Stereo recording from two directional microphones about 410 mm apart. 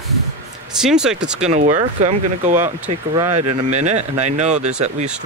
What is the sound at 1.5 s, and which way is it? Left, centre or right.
Speech, centre.